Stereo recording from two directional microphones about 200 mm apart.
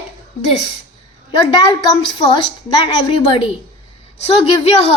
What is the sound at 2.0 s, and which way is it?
A woman's voice, 25° left (ahead or behind).